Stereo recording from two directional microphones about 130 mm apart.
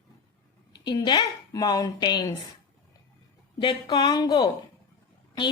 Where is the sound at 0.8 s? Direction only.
35° left (ahead or behind).